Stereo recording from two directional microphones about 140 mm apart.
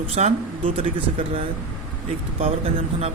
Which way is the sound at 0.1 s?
50° right (ahead or behind).